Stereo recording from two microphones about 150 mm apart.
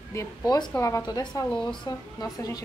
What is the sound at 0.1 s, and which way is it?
A woman's voice, 20° left (ahead or behind).